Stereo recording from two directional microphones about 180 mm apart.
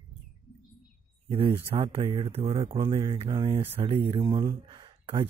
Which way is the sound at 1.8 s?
30° right (ahead or behind).